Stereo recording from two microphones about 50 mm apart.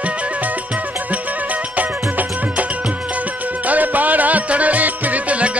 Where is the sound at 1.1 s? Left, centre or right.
Right.